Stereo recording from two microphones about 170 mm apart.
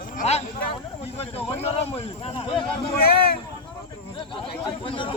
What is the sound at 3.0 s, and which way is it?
Speech, 65° left (ahead or behind).